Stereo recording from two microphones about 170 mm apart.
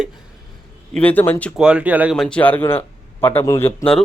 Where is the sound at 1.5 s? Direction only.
5° right (ahead or behind).